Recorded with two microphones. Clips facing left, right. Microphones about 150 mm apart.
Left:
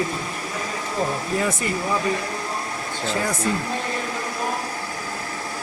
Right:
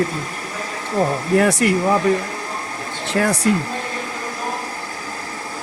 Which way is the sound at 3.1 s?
75° right (ahead or behind).